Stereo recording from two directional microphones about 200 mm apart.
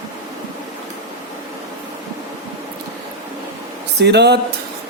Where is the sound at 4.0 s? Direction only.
55° right (ahead or behind).